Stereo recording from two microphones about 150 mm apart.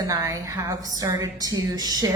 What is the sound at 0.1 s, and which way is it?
Speech, 20° right (ahead or behind).